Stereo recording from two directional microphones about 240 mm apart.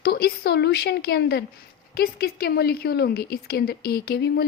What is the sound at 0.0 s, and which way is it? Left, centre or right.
A woman's voice, left.